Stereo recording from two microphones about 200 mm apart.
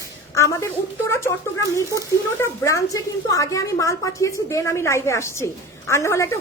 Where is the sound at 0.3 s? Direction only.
15° left (ahead or behind).